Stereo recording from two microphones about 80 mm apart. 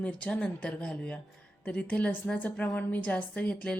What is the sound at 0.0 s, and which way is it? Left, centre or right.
A woman's voice, centre.